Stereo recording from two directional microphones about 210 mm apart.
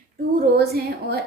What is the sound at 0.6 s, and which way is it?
Speech, 45° right (ahead or behind).